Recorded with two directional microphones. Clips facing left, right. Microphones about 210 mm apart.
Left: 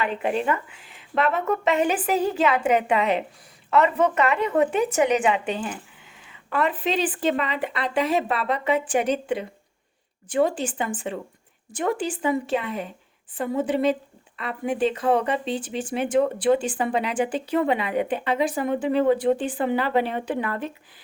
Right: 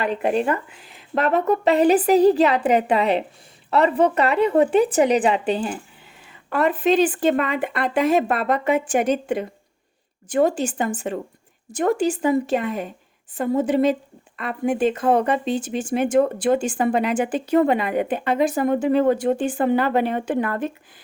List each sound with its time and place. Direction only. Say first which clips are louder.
0.0 s a woman's voice: right 4 dB; 40° right (ahead or behind)